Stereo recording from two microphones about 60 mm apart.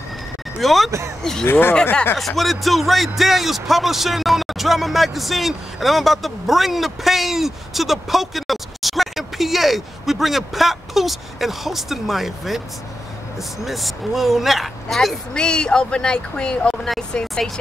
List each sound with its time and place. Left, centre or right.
0.6 s speech: centre
1.5 s speech: left
2.1 s speech: centre
13.7 s speech: centre
15.3 s speech: centre